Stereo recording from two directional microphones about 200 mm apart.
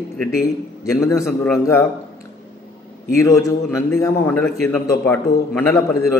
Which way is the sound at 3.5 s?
15° left (ahead or behind).